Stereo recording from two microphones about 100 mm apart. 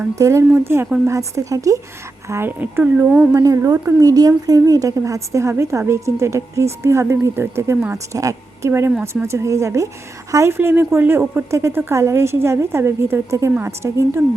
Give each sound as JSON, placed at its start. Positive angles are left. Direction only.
{"t": 0.2, "sound": "a woman's voice", "side_deg": -30}
{"t": 3.3, "sound": "a woman's voice", "side_deg": -35}